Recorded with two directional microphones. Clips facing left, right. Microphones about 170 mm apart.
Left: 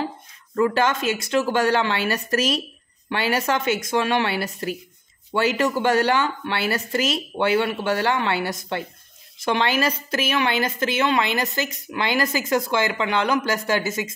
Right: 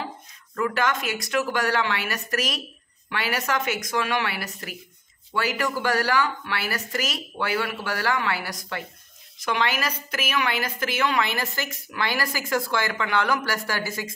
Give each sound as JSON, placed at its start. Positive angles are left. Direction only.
{"t": 0.6, "sound": "a woman's voice", "side_deg": 30}